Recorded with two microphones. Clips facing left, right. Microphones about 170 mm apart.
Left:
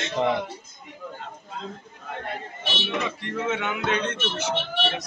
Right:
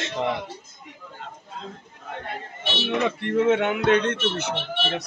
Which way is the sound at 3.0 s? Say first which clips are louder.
Right 8 dB; 60° right (ahead or behind).